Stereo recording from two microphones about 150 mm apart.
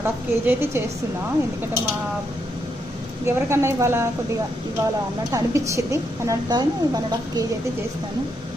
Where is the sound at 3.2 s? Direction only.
20° right (ahead or behind).